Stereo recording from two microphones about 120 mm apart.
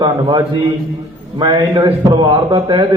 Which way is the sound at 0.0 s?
35° right (ahead or behind).